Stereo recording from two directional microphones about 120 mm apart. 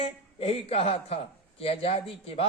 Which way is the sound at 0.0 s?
55° left (ahead or behind).